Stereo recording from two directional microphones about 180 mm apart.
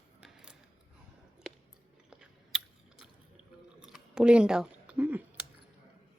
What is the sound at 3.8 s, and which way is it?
Chewing, 5° right (ahead or behind).